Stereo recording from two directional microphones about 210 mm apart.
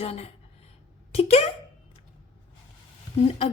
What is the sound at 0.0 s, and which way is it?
A woman's voice, 30° left (ahead or behind).